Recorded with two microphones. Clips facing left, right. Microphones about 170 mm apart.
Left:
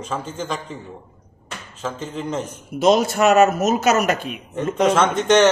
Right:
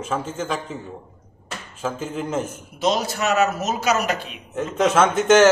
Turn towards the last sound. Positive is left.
turn(degrees=-5)  # may be behind; listen again after turning